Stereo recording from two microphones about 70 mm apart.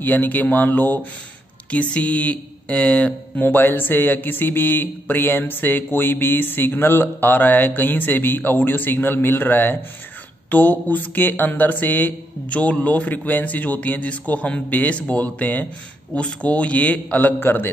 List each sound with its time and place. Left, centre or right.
0.0 s a man's voice: left
3.3 s a man's voice: left
17.4 s a man's voice: left